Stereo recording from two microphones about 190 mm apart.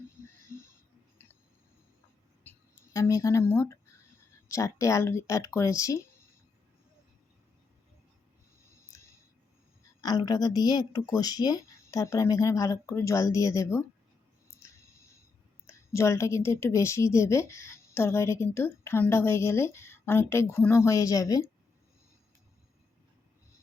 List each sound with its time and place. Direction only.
2.4 s a sound: 15° left (ahead or behind)
4.4 s a woman's voice: 15° left (ahead or behind)
10.0 s a woman's voice: 20° left (ahead or behind)
15.6 s a woman's voice: 15° left (ahead or behind)